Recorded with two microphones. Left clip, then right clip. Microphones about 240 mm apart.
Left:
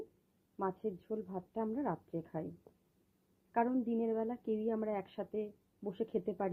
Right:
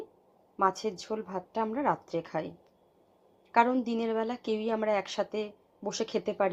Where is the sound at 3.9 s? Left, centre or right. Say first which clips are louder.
Right 5 dB; centre.